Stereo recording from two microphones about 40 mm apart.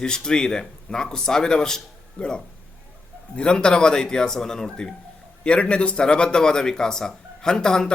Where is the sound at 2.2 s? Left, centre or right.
Left.